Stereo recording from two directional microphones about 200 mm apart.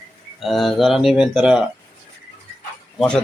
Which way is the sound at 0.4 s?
Centre (ahead or behind).